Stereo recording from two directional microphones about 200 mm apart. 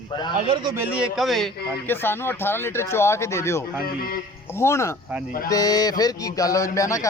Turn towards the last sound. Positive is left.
turn(degrees=15)  # may be behind; listen again after turning